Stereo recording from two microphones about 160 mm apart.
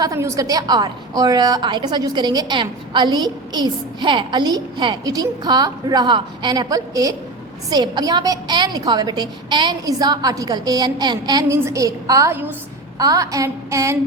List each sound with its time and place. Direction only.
0.0 s a woman's voice: 20° right (ahead or behind)